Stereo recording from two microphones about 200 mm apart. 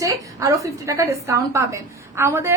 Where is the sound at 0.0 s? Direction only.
15° right (ahead or behind).